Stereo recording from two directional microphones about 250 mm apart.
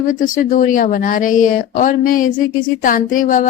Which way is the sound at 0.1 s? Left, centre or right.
Left.